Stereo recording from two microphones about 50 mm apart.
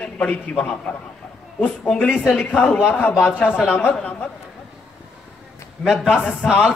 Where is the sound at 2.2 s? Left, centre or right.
Centre.